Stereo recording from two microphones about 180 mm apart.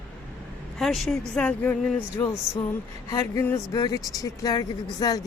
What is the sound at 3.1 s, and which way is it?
Speech, 15° left (ahead or behind).